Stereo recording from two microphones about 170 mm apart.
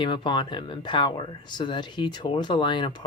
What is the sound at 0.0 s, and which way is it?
Speech, 25° left (ahead or behind).